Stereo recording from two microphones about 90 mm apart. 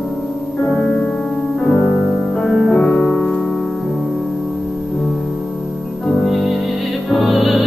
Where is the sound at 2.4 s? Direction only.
5° left (ahead or behind).